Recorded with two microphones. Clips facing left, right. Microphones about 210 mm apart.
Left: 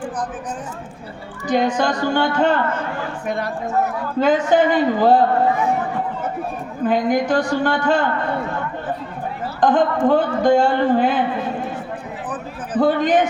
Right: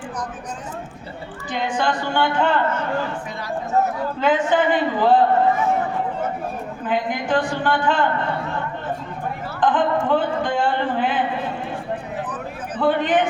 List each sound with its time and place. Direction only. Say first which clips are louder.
1.5 s a man's voice: left 5 dB; 40° left (ahead or behind)
3.2 s speech: left 9 dB; 60° left (ahead or behind)
4.2 s a man's voice: left 4 dB; 40° left (ahead or behind)
6.8 s a man's voice: left 6 dB; 40° left (ahead or behind)
9.6 s a man's voice: left 3 dB; 40° left (ahead or behind)
12.7 s a man's voice: left 3 dB; 40° left (ahead or behind)